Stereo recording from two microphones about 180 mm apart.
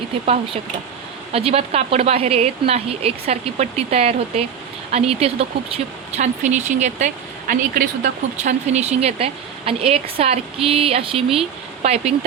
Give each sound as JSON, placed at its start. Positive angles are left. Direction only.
{"t": 1.3, "sound": "speech", "side_deg": -30}